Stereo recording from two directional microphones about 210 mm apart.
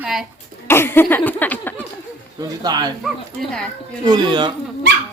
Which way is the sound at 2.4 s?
20° right (ahead or behind).